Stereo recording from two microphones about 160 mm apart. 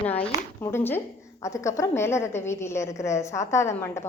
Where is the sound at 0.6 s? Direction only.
15° left (ahead or behind).